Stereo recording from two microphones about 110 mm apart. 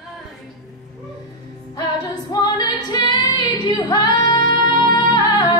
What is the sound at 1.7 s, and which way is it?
Music, 35° left (ahead or behind).